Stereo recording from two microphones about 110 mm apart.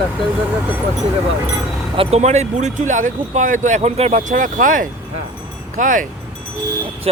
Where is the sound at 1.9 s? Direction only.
80° right.